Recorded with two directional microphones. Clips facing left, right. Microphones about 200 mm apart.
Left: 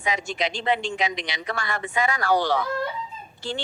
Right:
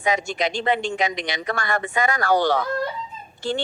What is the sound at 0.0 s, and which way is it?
Speech, 45° right (ahead or behind).